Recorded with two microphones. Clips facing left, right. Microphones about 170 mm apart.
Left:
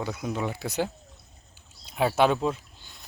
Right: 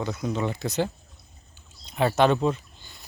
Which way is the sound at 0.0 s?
10° left (ahead or behind).